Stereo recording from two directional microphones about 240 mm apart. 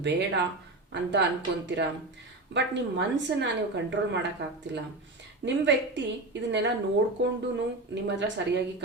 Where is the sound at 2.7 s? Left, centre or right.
Right.